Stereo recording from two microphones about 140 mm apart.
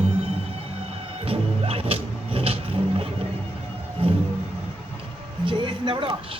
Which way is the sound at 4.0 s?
40° right (ahead or behind).